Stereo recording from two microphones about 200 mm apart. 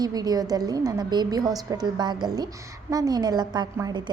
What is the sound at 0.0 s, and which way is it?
A woman's voice, 20° right (ahead or behind).